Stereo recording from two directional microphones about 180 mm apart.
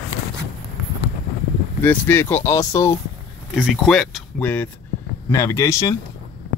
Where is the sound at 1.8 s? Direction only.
10° left (ahead or behind).